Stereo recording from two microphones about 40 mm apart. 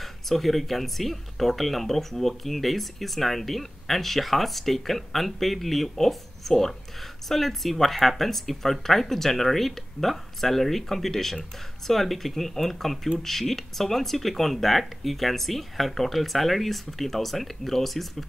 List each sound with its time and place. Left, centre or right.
0.0 s speech: centre